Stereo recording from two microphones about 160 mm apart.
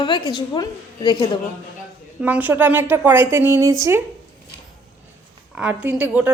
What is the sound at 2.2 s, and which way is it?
A woman's voice, 10° right (ahead or behind).